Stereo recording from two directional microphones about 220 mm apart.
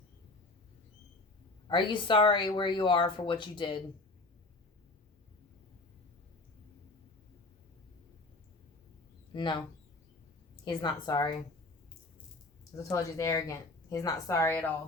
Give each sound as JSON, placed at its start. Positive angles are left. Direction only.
{"t": 1.6, "sound": "speech", "side_deg": 20}
{"t": 9.3, "sound": "speech", "side_deg": 20}
{"t": 10.7, "sound": "speech", "side_deg": 20}
{"t": 12.7, "sound": "a woman's voice", "side_deg": 15}